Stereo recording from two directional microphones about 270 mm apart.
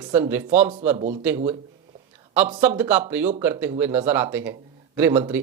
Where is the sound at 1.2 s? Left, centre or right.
Centre.